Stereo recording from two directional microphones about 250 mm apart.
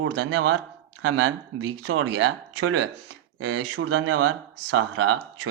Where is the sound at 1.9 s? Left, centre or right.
Right.